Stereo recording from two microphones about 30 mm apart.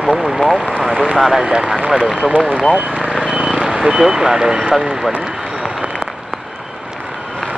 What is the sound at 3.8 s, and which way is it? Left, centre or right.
Speech, centre.